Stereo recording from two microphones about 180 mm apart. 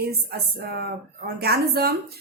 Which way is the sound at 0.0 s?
60° right (ahead or behind).